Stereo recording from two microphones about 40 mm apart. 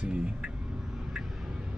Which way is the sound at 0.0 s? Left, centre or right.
Right.